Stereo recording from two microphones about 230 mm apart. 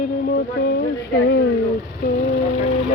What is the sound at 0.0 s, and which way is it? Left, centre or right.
Music, left.